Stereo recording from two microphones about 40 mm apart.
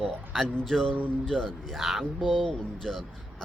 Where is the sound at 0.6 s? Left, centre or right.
Centre.